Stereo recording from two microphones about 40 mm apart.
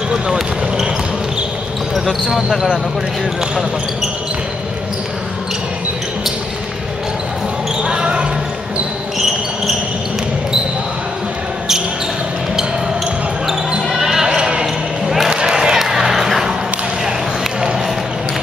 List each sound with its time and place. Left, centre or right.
0.1 s basketball bounce: centre
2.3 s speech: centre
7.8 s basketball bounce: right
13.9 s basketball bounce: centre
14.3 s basketball bounce: right
15.2 s a sound: centre
15.8 s a sound: centre